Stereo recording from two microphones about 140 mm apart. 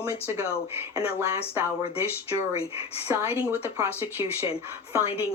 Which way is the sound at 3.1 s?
20° right (ahead or behind).